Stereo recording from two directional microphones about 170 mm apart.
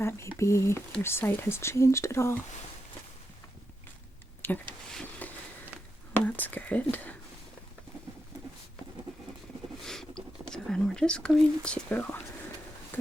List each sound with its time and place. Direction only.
0.0 s speech: 15° left (ahead or behind)
4.4 s speech: 10° left (ahead or behind)
4.9 s a sound: 5° left (ahead or behind)
6.1 s speech: 10° left (ahead or behind)
9.8 s speech: 5° left (ahead or behind)